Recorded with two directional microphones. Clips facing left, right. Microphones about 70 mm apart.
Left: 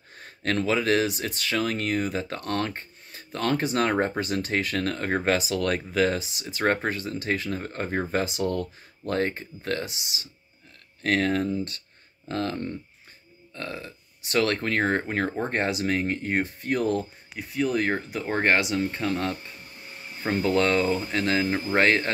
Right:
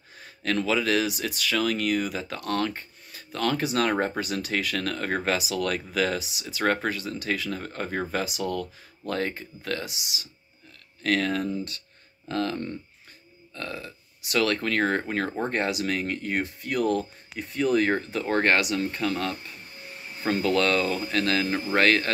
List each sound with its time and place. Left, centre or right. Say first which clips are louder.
0.2 s speech: left 1 dB; left
17.4 s speech: right 2 dB; centre
18.2 s speech: even; centre